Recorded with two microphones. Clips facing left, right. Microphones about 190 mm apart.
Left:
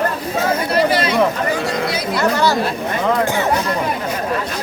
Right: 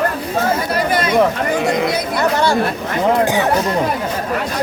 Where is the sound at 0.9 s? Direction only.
50° right (ahead or behind).